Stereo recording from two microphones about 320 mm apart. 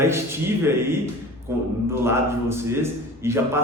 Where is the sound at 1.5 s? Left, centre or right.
Centre.